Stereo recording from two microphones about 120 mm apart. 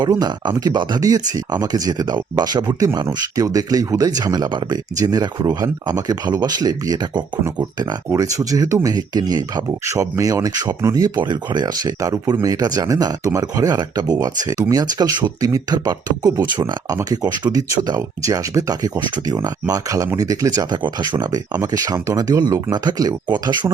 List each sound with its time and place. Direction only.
0.0 s speech: 35° right (ahead or behind)